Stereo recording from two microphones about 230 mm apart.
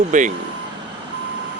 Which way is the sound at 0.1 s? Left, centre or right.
Right.